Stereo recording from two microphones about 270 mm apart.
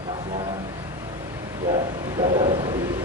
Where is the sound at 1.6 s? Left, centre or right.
Centre.